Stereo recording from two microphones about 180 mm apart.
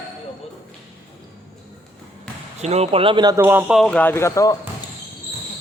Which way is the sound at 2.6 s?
35° right (ahead or behind).